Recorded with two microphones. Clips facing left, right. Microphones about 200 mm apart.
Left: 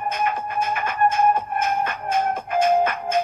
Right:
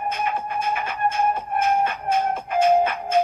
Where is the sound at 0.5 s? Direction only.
50° left (ahead or behind).